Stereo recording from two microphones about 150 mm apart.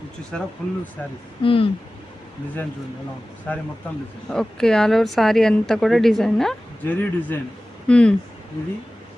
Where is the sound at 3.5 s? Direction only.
10° left (ahead or behind).